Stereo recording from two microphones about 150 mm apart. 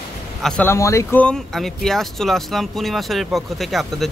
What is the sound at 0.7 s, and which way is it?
Speech, 20° left (ahead or behind).